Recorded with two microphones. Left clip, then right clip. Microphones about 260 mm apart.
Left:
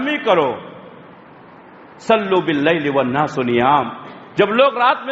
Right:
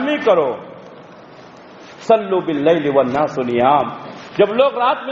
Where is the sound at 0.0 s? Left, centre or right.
Left.